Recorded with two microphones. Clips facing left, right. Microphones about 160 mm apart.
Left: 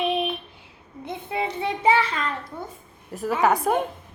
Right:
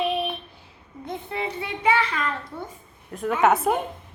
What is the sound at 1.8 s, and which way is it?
Speech, 25° left (ahead or behind).